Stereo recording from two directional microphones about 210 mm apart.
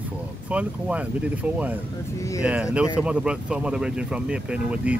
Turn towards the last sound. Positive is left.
turn(degrees=-5)  # may be behind; listen again after turning